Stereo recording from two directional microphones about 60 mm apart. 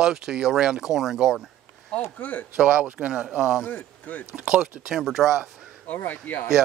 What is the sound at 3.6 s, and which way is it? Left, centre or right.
Speech, left.